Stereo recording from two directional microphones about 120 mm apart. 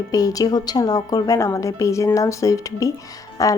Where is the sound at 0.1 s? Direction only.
30° left (ahead or behind).